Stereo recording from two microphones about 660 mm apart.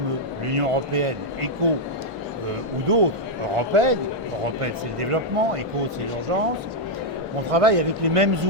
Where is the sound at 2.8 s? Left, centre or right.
Right.